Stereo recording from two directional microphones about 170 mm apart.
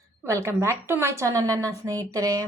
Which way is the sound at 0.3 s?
15° right (ahead or behind).